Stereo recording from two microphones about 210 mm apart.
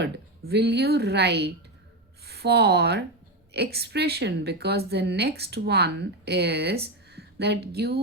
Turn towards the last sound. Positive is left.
turn(degrees=-50)  # may be behind; listen again after turning